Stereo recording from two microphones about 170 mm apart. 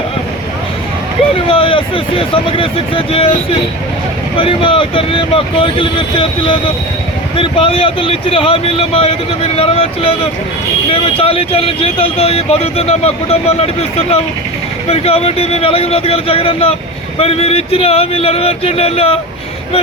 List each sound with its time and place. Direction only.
1.5 s speech: 30° left (ahead or behind)
14.8 s speech: 35° left (ahead or behind)